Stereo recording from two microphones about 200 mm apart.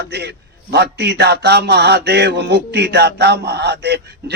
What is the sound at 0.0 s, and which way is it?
A man's voice, 55° right (ahead or behind).